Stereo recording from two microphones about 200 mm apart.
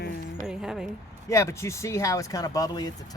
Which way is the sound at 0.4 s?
5° right (ahead or behind).